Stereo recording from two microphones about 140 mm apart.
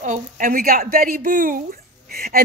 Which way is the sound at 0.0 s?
70° right (ahead or behind).